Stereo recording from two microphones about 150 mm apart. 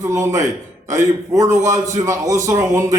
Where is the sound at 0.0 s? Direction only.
20° right (ahead or behind).